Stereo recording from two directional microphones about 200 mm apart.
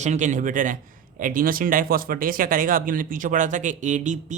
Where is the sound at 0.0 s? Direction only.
35° right (ahead or behind).